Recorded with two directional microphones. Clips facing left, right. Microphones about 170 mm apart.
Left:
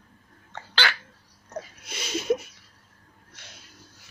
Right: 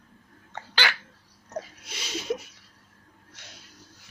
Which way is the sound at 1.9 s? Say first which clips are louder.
Left 5 dB; 50° left (ahead or behind).